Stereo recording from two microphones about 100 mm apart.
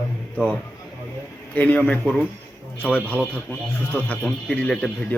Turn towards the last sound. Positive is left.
turn(degrees=10)  # may be behind; listen again after turning